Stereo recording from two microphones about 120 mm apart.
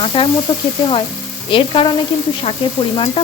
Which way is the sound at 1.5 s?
45° left (ahead or behind).